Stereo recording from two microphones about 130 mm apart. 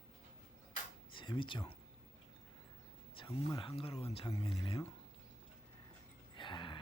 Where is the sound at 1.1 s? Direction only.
40° left (ahead or behind).